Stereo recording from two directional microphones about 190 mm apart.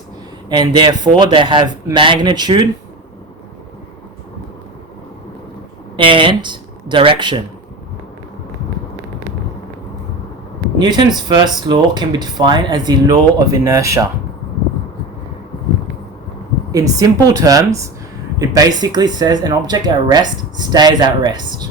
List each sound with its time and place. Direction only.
0.4 s speech: 20° right (ahead or behind)
6.0 s speech: 25° right (ahead or behind)
10.8 s speech: 20° right (ahead or behind)
16.7 s speech: 20° right (ahead or behind)